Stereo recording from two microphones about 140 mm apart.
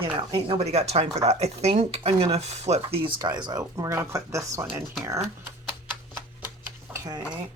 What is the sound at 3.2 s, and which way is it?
Speech, 30° right (ahead or behind).